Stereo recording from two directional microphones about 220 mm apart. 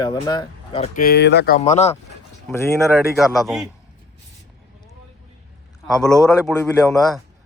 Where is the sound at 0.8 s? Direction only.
40° left (ahead or behind).